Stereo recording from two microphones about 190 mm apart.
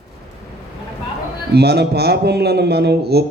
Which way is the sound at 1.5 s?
60° right (ahead or behind).